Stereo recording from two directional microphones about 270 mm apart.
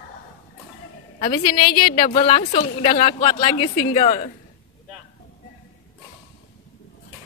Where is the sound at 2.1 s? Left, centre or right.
Left.